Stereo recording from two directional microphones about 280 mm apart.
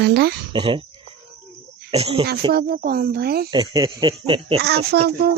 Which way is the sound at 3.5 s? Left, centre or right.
Centre.